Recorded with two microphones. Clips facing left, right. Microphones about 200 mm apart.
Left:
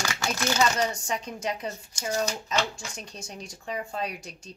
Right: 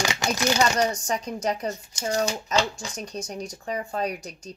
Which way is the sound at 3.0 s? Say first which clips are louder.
Right 8 dB; 40° right (ahead or behind).